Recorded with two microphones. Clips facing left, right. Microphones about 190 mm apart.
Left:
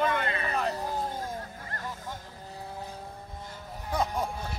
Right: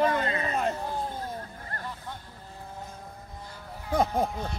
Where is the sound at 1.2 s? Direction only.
45° left (ahead or behind).